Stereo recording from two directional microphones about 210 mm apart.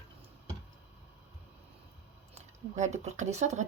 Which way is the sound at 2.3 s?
35° right (ahead or behind).